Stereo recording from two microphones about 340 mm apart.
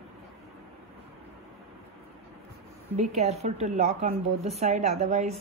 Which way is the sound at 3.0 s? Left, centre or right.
Centre.